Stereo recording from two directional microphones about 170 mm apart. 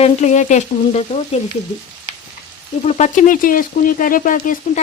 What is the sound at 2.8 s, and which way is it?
Speech, 45° left (ahead or behind).